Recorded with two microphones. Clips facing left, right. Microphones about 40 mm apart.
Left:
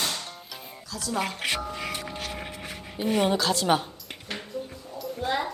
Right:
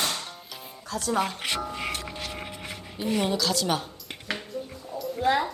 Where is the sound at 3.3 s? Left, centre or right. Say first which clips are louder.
Left 1 dB; left.